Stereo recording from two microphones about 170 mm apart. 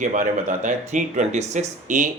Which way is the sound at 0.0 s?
50° right (ahead or behind).